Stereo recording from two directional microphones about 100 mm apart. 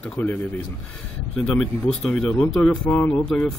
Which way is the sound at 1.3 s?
5° left (ahead or behind).